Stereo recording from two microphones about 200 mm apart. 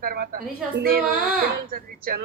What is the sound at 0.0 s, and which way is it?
Speech, 50° right (ahead or behind).